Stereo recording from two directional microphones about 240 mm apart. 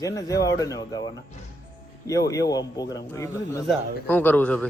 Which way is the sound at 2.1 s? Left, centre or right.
Centre.